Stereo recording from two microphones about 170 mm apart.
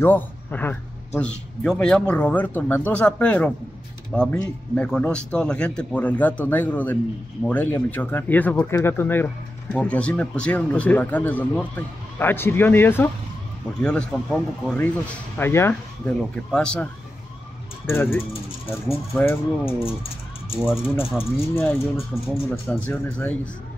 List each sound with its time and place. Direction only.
0.0 s speech: 10° left (ahead or behind)
19.6 s speech: 35° left (ahead or behind)
20.5 s speech: 5° right (ahead or behind)
21.2 s speech: 15° left (ahead or behind)
22.1 s speech: centre (ahead or behind)
22.5 s speech: 10° left (ahead or behind)